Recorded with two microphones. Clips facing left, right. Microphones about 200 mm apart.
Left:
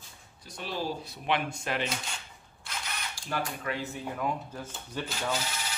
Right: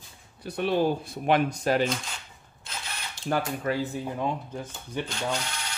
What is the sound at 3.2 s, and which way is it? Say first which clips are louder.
Mechanisms: right 12 dB; 20° right (ahead or behind).